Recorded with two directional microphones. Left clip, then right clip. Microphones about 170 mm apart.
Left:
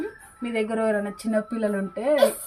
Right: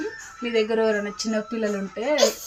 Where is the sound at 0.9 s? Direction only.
25° left (ahead or behind).